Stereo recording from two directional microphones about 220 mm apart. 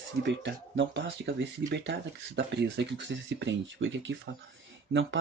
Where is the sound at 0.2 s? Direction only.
55° right (ahead or behind).